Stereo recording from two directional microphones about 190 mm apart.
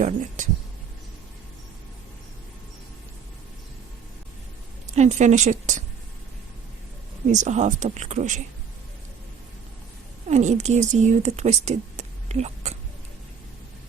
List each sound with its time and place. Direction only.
0.4 s speech: 40° right (ahead or behind)
4.9 s speech: 40° right (ahead or behind)
7.3 s speech: 40° right (ahead or behind)
10.2 s a woman's voice: 35° right (ahead or behind)